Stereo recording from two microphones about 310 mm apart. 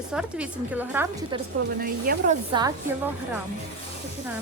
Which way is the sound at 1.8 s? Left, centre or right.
Right.